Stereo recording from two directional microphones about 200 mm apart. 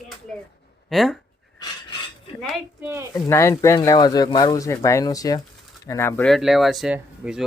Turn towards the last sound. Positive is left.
turn(degrees=-5)  # may be behind; listen again after turning